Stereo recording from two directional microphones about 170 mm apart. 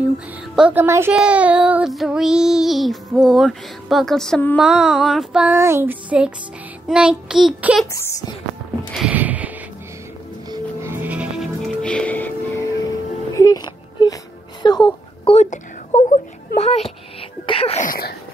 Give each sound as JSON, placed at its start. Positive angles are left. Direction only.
{"t": 0.6, "sound": "speech", "side_deg": -10}
{"t": 1.1, "sound": "child singing", "side_deg": -5}
{"t": 7.9, "sound": "a child's voice", "side_deg": 20}
{"t": 8.9, "sound": "a sound", "side_deg": -5}
{"t": 10.5, "sound": "music", "side_deg": -15}
{"t": 12.8, "sound": "whimper", "side_deg": 20}
{"t": 15.3, "sound": "a sound", "side_deg": 45}
{"t": 16.5, "sound": "a child's voice", "side_deg": 40}
{"t": 17.5, "sound": "sneeze", "side_deg": 35}
{"t": 17.8, "sound": "a sound", "side_deg": 60}